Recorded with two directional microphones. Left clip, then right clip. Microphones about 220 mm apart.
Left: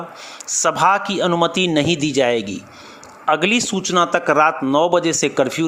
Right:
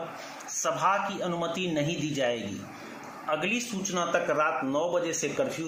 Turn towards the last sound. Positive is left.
turn(degrees=50)  # may be behind; listen again after turning